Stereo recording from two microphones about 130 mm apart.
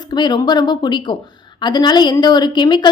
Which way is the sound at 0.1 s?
35° left (ahead or behind).